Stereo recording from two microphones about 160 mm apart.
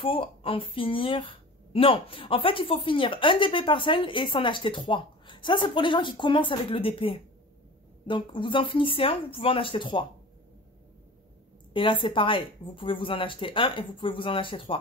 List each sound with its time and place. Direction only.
0.0 s a woman's voice: 35° left (ahead or behind)
11.7 s a woman's voice: 30° left (ahead or behind)